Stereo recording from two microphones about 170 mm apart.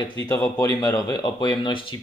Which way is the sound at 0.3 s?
20° left (ahead or behind).